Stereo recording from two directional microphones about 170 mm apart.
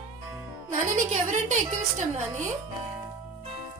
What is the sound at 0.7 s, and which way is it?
Music, 45° right (ahead or behind).